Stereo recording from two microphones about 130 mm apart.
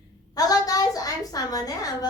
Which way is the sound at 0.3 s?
30° left (ahead or behind).